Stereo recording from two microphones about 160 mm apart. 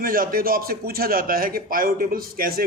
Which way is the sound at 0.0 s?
65° right (ahead or behind).